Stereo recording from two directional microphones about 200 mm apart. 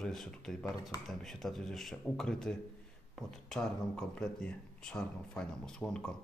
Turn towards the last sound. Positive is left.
turn(degrees=5)  # may be behind; listen again after turning